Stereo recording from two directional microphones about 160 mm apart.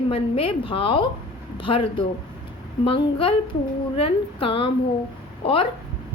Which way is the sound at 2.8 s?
35° left (ahead or behind).